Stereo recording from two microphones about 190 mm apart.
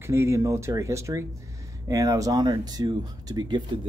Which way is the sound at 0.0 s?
15° right (ahead or behind).